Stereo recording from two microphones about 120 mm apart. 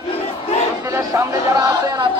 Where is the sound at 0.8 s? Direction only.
30° right (ahead or behind).